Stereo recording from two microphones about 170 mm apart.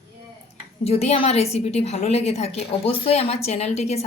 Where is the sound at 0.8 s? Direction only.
40° left (ahead or behind).